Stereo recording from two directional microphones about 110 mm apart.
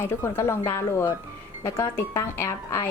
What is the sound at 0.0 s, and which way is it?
Speech, 25° left (ahead or behind).